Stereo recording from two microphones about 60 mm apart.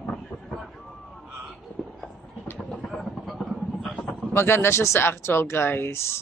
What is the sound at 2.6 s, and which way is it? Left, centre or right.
Vehicle, centre.